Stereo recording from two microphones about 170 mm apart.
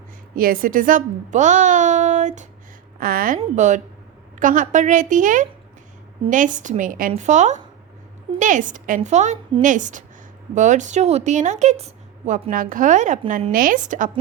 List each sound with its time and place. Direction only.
0.3 s speech: 55° right (ahead or behind)
3.0 s speech: 60° right (ahead or behind)